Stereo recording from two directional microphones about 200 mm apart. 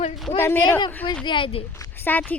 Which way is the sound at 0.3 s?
10° left (ahead or behind).